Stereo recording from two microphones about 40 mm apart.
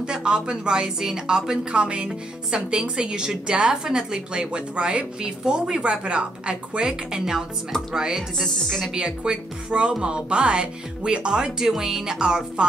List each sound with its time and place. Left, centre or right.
0.0 s a woman's voice: right
8.4 s speech: centre
8.9 s a woman's voice: right
11.6 s speech: centre